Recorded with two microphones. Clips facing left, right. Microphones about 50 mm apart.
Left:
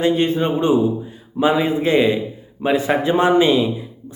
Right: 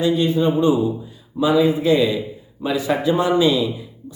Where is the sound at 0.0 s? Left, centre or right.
Left.